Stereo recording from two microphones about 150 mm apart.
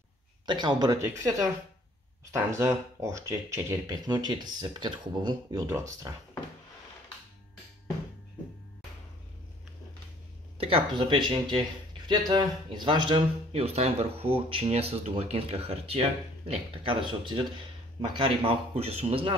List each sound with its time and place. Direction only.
0.5 s speech: 30° right (ahead or behind)
10.6 s speech: 35° right (ahead or behind)
13.5 s speech: 45° right (ahead or behind)